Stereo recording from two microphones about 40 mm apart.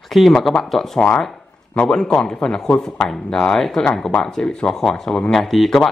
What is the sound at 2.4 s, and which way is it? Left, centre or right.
Speech, centre.